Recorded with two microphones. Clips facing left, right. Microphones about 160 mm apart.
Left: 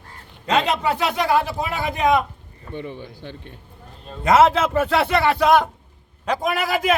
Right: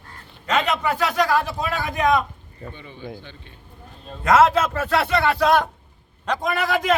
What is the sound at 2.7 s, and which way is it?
Speech, 65° left (ahead or behind).